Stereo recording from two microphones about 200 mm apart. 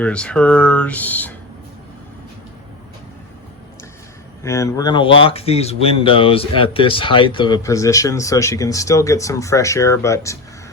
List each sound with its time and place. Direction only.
0.0 s speech: 5° left (ahead or behind)
4.4 s speech: 15° left (ahead or behind)